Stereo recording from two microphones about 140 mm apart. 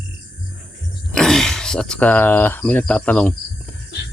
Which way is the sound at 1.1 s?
5° left (ahead or behind).